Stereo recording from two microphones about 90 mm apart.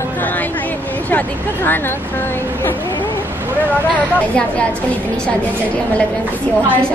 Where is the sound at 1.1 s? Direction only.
20° left (ahead or behind).